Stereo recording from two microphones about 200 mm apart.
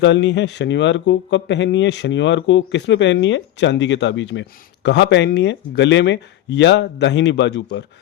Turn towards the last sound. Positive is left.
turn(degrees=60)  # may be behind; listen again after turning